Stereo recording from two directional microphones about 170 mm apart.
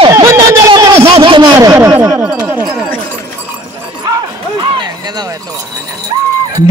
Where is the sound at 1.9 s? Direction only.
15° right (ahead or behind).